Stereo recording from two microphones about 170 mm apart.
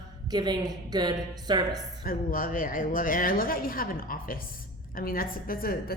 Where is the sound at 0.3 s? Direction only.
25° right (ahead or behind).